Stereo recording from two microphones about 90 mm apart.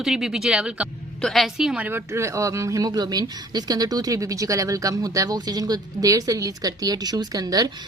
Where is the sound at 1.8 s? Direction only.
30° right (ahead or behind).